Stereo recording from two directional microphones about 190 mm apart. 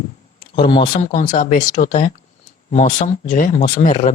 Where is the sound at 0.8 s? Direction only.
40° left (ahead or behind).